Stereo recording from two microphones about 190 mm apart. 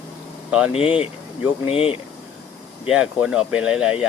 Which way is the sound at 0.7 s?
30° left (ahead or behind).